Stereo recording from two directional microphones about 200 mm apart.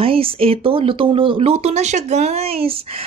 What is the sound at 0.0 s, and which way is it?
Speech, 25° right (ahead or behind).